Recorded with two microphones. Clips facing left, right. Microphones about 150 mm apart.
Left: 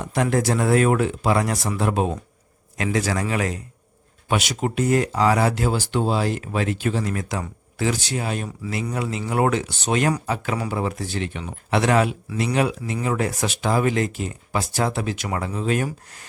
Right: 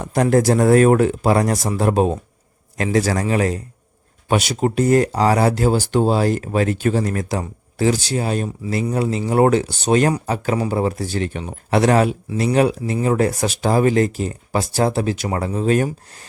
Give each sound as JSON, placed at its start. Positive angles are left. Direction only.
{"t": 0.0, "sound": "speech", "side_deg": -40}